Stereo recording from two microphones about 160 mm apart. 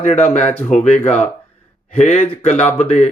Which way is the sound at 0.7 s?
45° left (ahead or behind).